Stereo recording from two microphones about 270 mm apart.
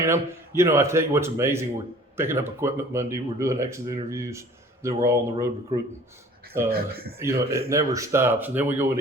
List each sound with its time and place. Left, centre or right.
0.0 s speech: centre
6.7 s speech: right
7.2 s speech: centre